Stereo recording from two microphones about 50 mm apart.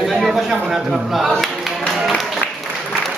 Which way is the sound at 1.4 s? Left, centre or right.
Centre.